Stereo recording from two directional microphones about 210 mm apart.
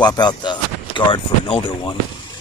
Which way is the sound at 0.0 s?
20° left (ahead or behind).